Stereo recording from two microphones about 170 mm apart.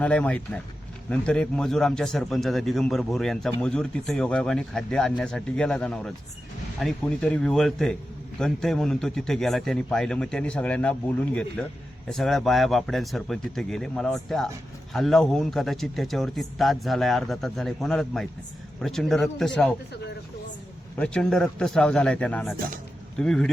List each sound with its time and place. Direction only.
0.0 s a man's voice: 5° left (ahead or behind)
21.0 s a man's voice: 5° left (ahead or behind)
22.5 s a man's voice: 55° right (ahead or behind)
23.1 s a man's voice: 5° left (ahead or behind)